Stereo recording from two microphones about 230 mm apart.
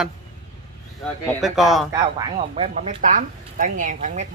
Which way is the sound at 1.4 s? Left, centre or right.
Centre.